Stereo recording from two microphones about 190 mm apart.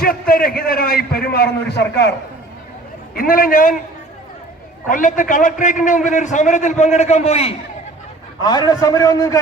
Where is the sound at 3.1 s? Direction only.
50° left (ahead or behind).